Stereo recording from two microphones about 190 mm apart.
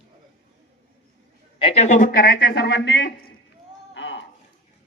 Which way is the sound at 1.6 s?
30° left (ahead or behind).